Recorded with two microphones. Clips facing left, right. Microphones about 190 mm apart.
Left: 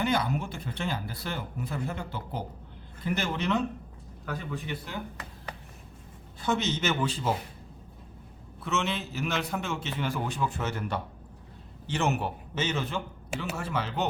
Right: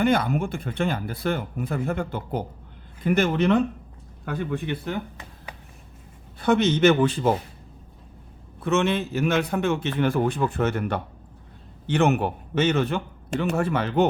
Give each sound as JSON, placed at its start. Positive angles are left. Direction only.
{"t": 0.0, "sound": "a man's voice", "side_deg": -55}
{"t": 6.4, "sound": "a man's voice", "side_deg": -60}
{"t": 8.6, "sound": "a man's voice", "side_deg": -55}